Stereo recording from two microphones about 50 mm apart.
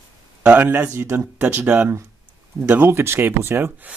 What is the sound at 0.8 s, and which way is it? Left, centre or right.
Speech, right.